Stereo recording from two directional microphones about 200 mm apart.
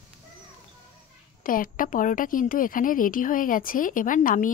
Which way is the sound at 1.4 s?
45° left (ahead or behind).